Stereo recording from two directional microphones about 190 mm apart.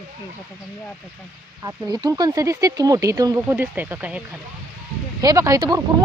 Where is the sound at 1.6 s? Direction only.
20° right (ahead or behind).